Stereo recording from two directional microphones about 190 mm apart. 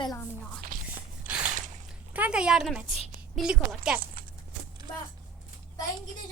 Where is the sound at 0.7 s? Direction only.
45° right (ahead or behind).